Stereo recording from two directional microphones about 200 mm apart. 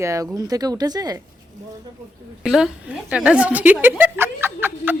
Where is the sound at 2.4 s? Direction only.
Centre (ahead or behind).